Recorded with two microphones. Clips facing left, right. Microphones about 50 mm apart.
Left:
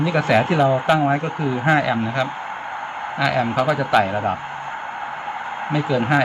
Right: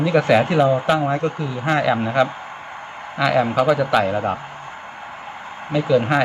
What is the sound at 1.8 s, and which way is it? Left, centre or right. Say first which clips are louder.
Speech: right 3 dB; centre.